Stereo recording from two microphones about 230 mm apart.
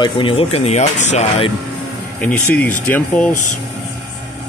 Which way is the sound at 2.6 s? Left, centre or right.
Centre.